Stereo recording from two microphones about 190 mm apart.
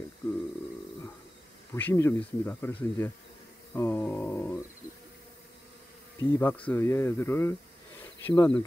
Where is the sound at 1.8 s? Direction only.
10° left (ahead or behind).